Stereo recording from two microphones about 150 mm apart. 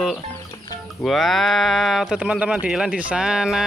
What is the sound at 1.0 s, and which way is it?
Speech, centre (ahead or behind).